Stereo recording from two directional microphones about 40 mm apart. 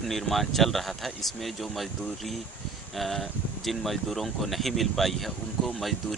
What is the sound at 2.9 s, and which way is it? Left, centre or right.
Speech, centre.